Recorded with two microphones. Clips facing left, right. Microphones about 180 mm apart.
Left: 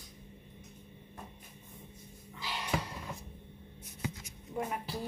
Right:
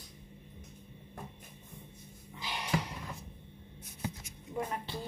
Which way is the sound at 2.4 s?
20° right (ahead or behind).